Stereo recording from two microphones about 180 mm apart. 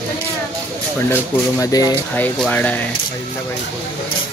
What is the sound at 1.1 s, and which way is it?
Speech, 20° left (ahead or behind).